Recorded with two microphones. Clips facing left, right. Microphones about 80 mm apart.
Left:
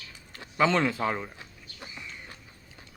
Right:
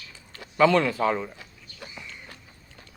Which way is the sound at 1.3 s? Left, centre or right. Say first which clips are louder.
Right 1 dB; left.